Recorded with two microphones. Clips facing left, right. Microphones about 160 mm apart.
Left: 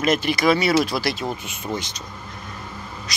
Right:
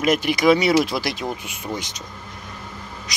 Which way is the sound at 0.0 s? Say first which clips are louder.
Right 2 dB; 15° right (ahead or behind).